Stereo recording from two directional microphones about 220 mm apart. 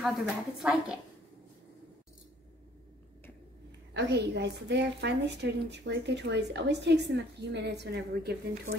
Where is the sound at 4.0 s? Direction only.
50° right (ahead or behind).